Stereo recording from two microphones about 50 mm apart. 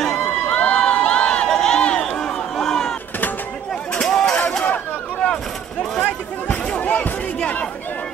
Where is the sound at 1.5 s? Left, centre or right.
Centre.